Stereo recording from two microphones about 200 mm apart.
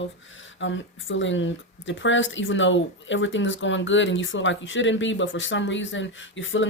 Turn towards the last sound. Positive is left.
turn(degrees=70)  # may be behind; listen again after turning